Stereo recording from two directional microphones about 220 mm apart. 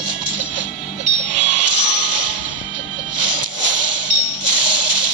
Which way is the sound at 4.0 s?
90° right.